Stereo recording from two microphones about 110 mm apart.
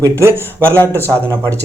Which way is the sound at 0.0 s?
25° right (ahead or behind).